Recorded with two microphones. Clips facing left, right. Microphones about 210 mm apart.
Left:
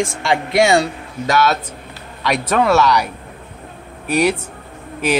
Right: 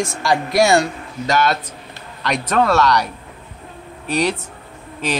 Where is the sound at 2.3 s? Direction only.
5° left (ahead or behind).